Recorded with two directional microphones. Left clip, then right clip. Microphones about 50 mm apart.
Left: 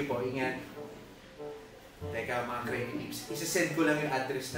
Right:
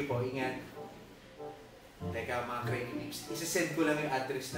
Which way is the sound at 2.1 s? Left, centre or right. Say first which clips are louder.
Left 2 dB; centre.